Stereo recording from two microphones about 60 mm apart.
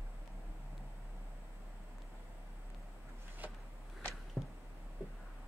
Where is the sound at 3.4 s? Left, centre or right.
Right.